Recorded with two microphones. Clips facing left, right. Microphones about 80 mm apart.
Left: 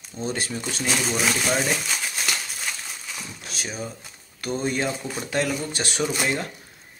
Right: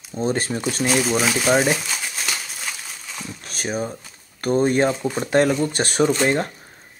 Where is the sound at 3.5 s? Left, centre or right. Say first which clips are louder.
Right 7 dB; right.